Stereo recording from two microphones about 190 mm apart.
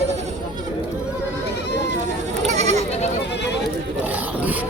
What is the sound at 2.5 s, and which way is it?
Goat, 35° right (ahead or behind).